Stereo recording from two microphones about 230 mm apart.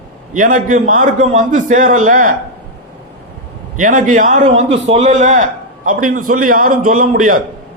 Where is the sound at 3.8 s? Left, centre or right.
Right.